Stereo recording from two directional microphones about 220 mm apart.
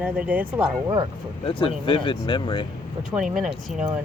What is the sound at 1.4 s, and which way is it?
Speech, 25° left (ahead or behind).